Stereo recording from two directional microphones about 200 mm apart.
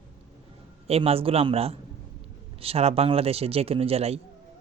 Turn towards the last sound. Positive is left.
turn(degrees=-30)  # may be behind; listen again after turning